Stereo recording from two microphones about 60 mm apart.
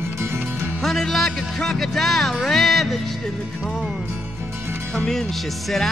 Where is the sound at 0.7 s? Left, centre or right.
Centre.